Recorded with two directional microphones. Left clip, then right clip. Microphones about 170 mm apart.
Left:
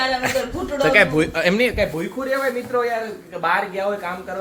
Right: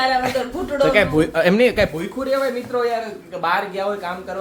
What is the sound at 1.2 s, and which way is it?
Speech, 35° right (ahead or behind).